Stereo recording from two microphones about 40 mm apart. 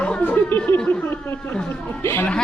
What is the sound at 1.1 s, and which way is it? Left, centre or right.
Speech, left.